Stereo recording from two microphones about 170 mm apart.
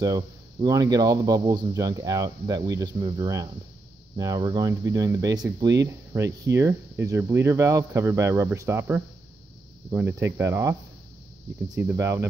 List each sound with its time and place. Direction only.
0.0 s speech: 20° right (ahead or behind)